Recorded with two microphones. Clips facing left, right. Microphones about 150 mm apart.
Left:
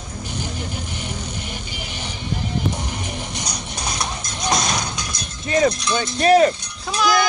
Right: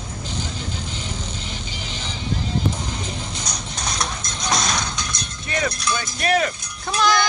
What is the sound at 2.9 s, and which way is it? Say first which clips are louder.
Music: left 1 dB; 15° left (ahead or behind).